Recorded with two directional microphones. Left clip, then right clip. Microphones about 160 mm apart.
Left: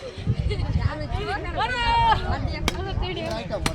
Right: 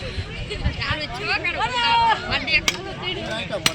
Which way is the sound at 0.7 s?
25° right (ahead or behind).